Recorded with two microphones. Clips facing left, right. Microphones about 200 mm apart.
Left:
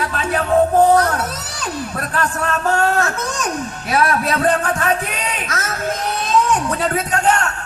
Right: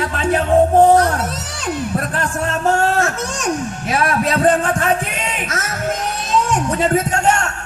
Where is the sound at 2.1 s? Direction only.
30° right (ahead or behind).